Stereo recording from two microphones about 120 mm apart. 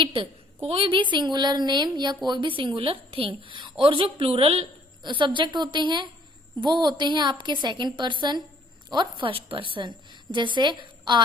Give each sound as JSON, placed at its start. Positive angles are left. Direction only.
{"t": 0.0, "sound": "a woman's voice", "side_deg": -45}
{"t": 5.0, "sound": "a woman's voice", "side_deg": -40}